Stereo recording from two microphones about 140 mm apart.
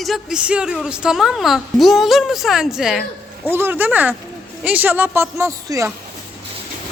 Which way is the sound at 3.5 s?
15° right (ahead or behind).